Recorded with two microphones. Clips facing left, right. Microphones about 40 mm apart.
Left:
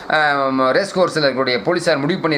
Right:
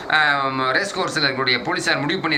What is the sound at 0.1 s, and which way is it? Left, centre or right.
Speech, right.